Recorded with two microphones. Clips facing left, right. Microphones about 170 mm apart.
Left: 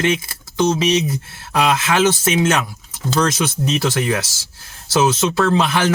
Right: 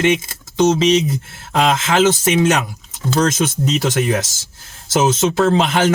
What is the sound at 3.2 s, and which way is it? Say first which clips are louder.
Speech: right 2 dB; 45° right (ahead or behind).